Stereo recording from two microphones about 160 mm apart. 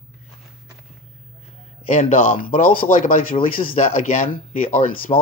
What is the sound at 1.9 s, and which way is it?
Speech, 50° left (ahead or behind).